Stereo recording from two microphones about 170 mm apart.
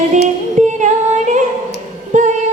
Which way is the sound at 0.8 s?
45° right (ahead or behind).